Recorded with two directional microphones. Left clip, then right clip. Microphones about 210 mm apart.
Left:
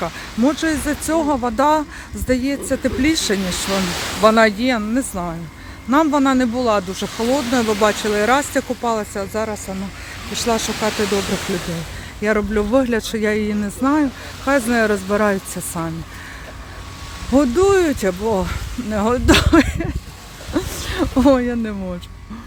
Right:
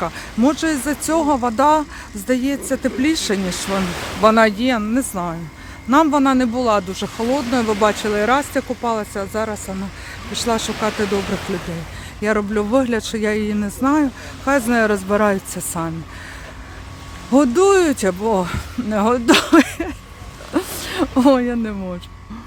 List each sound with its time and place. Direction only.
0.0 s speech: 5° right (ahead or behind)
3.6 s speech: 50° left (ahead or behind)
4.2 s speech: centre (ahead or behind)
11.2 s speech: 50° left (ahead or behind)
12.2 s speech: centre (ahead or behind)
17.3 s speech: 10° right (ahead or behind)
20.5 s zipper: 5° right (ahead or behind)